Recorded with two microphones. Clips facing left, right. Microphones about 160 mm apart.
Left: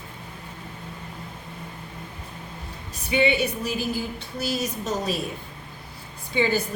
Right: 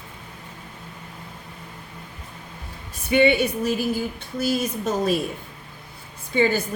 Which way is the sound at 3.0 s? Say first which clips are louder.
Right 4 dB; 55° right (ahead or behind).